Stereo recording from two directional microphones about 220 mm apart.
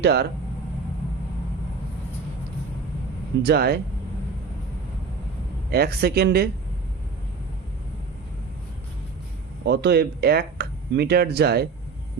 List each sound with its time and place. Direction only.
0.0 s speech: 50° right (ahead or behind)
3.4 s speech: 45° right (ahead or behind)
5.7 s speech: 45° right (ahead or behind)
9.6 s speech: 50° right (ahead or behind)